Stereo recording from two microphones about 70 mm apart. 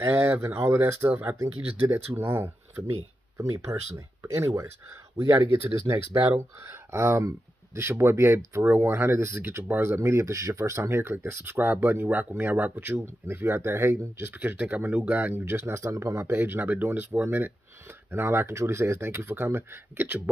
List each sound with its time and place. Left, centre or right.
0.1 s speech: right
3.3 s speech: right
5.9 s speech: right
6.6 s speech: right
14.3 s speech: right